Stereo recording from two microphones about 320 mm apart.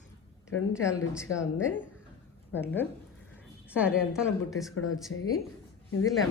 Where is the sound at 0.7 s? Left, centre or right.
Centre.